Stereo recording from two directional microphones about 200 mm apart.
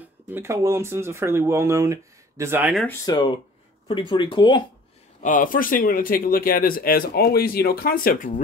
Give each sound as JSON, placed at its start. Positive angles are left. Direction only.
{"t": 0.3, "sound": "speech", "side_deg": -10}
{"t": 3.1, "sound": "speech", "side_deg": 25}
{"t": 5.2, "sound": "speech", "side_deg": 40}